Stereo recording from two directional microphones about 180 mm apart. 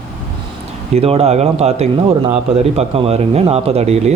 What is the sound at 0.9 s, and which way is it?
Speech, 35° right (ahead or behind).